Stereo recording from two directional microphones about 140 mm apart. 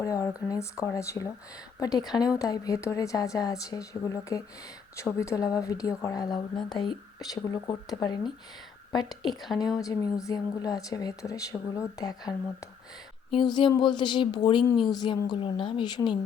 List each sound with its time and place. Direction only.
0.0 s a sound: 25° left (ahead or behind)
0.4 s speech: 20° left (ahead or behind)
9.8 s a woman's voice: 25° left (ahead or behind)